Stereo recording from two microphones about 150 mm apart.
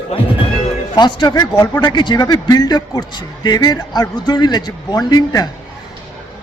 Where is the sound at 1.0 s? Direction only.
30° left (ahead or behind).